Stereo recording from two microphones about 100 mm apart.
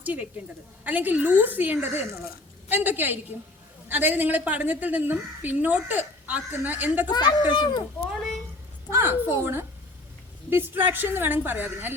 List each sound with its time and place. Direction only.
0.0 s a woman's voice: 15° right (ahead or behind)
7.1 s speech: 45° left (ahead or behind)
8.9 s a woman's voice: 25° right (ahead or behind)